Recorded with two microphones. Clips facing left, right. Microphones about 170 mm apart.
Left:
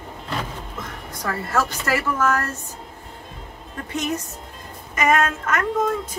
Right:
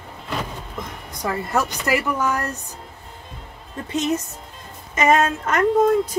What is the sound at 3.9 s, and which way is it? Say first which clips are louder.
A woman's voice: right 4 dB; 25° right (ahead or behind).